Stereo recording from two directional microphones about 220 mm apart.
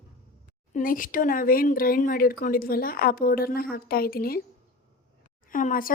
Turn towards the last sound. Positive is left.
turn(degrees=40)  # may be behind; listen again after turning